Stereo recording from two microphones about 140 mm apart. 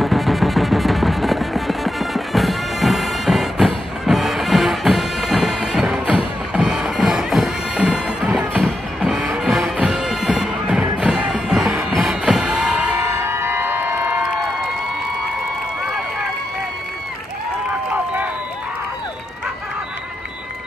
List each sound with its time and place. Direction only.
0.0 s music: centre (ahead or behind)
9.4 s bagpipes: 5° right (ahead or behind)
13.0 s a sound: 20° right (ahead or behind)